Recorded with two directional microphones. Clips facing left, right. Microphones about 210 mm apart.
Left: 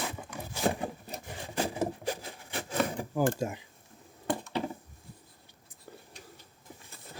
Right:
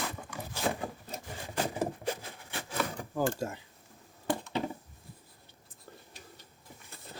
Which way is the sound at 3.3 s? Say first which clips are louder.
Left 3 dB; 15° left (ahead or behind).